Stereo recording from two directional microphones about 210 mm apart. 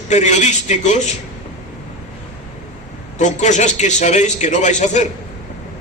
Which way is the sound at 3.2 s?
35° left (ahead or behind).